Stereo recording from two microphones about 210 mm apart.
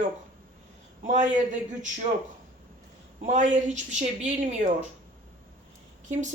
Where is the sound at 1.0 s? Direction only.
35° right (ahead or behind).